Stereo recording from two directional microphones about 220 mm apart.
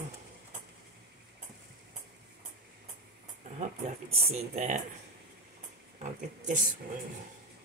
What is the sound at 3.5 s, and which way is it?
Speech, 30° right (ahead or behind).